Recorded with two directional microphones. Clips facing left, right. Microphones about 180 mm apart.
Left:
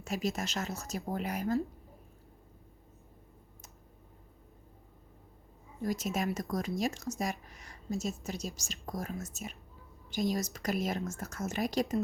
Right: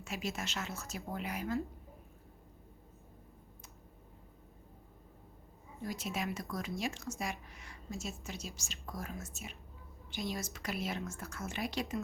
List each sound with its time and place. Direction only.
0.0 s speech: 40° left (ahead or behind)
5.8 s speech: 40° left (ahead or behind)